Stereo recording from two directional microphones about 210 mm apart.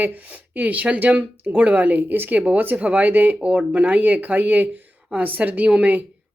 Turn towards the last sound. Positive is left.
turn(degrees=-5)  # may be behind; listen again after turning